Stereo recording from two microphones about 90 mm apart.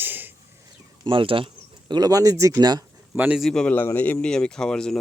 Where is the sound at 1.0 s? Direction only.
70° right (ahead or behind).